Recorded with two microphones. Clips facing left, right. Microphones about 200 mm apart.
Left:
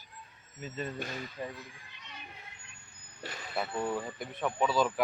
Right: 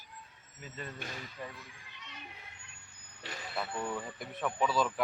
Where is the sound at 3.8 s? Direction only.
25° left (ahead or behind).